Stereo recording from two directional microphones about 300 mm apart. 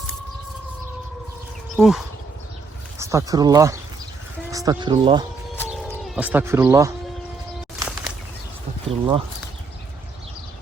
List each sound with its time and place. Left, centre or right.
1.7 s speech: centre
3.0 s speech: centre
5.5 s bird: centre
7.8 s a sound: centre
8.9 s speech: centre